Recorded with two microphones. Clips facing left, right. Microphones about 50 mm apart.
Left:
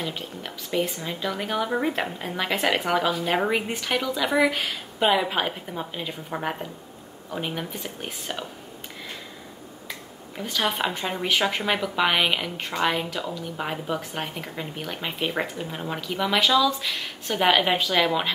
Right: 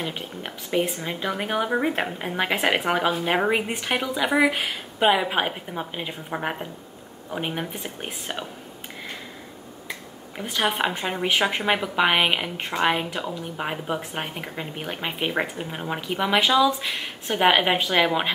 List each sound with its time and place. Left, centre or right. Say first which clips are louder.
0.0 s speech: right 1 dB; right
9.8 s speech: right 2 dB; centre